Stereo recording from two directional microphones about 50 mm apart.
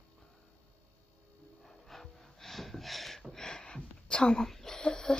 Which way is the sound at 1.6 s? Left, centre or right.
Centre.